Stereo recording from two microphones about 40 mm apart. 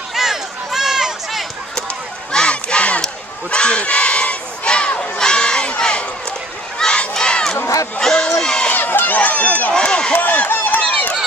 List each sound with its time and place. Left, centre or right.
0.1 s run: centre
2.3 s battle cry: left
3.4 s crowd: left
6.8 s crowd: centre
8.0 s a sound: centre
8.7 s run: left
9.2 s run: left
9.7 s run: left
10.1 s run: left